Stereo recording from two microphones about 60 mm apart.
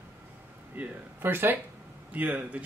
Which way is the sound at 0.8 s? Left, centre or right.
Right.